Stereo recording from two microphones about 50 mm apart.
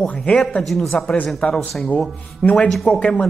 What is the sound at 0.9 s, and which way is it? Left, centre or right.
Speech, centre.